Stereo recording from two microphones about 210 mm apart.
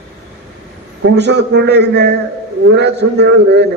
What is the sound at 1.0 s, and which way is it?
A man's voice, 55° right (ahead or behind).